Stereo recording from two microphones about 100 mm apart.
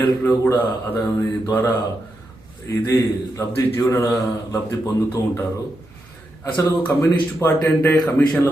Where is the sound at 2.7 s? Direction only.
30° left (ahead or behind).